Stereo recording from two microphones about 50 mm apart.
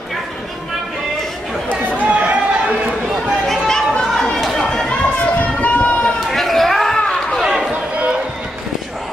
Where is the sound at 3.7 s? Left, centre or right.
Centre.